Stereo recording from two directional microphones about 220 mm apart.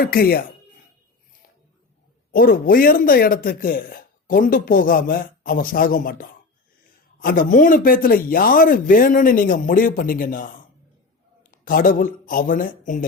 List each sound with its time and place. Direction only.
0.0 s speech: 45° left (ahead or behind)
2.3 s a man's voice: 40° left (ahead or behind)